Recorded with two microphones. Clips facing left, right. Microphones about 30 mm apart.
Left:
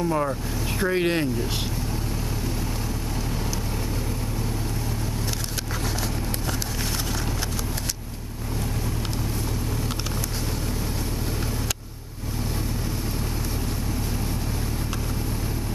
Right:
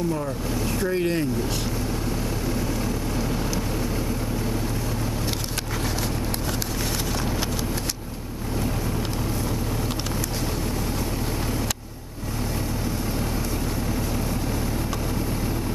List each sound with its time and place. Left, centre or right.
0.7 s speech: left